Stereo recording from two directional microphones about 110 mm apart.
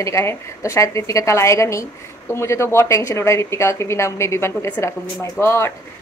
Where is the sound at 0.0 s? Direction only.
25° left (ahead or behind).